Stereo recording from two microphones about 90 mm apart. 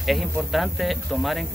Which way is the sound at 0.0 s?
Centre (ahead or behind).